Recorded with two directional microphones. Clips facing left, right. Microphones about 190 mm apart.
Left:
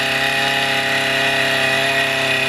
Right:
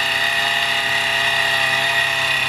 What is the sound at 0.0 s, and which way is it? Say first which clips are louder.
Power tool: left 5 dB; 75° left (ahead or behind).